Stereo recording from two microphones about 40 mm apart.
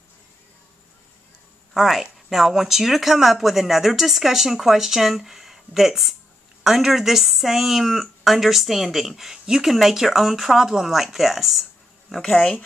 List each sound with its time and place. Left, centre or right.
1.7 s speech: centre
12.4 s speech: left